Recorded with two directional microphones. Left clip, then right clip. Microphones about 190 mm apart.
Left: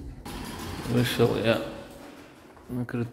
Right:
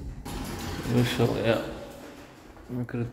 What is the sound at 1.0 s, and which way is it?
Speech, 20° left (ahead or behind).